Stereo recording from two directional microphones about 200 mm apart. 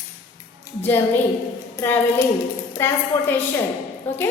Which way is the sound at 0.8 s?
10° left (ahead or behind).